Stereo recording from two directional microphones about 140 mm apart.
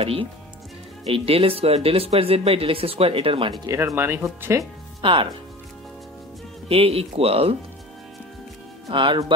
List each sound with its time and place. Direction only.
0.0 s speech: 40° right (ahead or behind)
3.7 s speech: 15° right (ahead or behind)
5.0 s speech: 40° right (ahead or behind)
6.7 s speech: 45° right (ahead or behind)
8.9 s speech: 35° right (ahead or behind)